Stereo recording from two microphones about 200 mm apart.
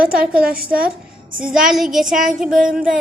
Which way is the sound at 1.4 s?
5° right (ahead or behind).